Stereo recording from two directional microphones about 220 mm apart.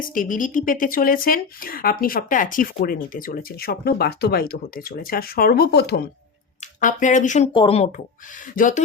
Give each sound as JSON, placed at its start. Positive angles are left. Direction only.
{"t": 0.1, "sound": "speech", "side_deg": 40}
{"t": 6.6, "sound": "speech", "side_deg": 35}
{"t": 7.5, "sound": "speech", "side_deg": 25}